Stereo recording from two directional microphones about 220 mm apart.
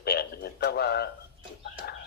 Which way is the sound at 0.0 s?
45° left (ahead or behind).